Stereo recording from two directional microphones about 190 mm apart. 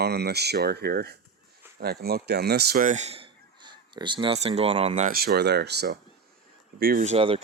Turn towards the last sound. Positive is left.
turn(degrees=-30)  # may be behind; listen again after turning